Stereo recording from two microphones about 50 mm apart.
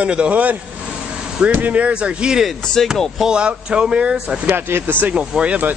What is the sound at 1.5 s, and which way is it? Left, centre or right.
Speech, right.